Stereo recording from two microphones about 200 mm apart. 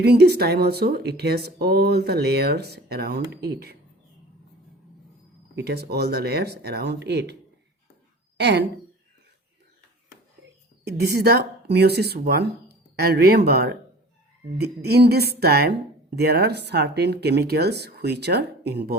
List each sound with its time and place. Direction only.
0.0 s speech: 55° right (ahead or behind)
5.5 s speech: 55° right (ahead or behind)
8.4 s a woman's voice: 60° right (ahead or behind)
10.8 s speech: 55° right (ahead or behind)